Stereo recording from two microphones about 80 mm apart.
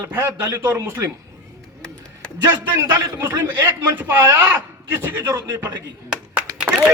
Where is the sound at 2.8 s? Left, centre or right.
Right.